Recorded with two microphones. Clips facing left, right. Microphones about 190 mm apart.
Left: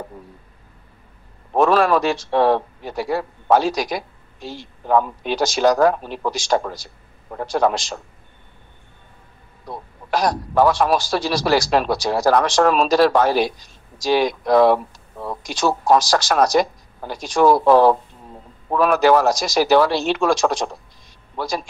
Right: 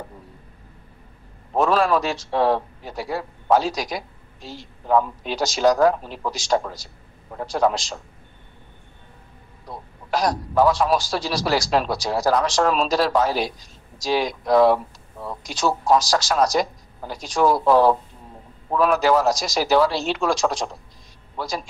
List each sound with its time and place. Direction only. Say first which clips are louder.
1.5 s a man's voice: left 3 dB; 65° left (ahead or behind)
10.1 s a man's voice: left 2 dB; 65° left (ahead or behind)